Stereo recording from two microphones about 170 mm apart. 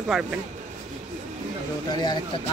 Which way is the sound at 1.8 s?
25° left (ahead or behind).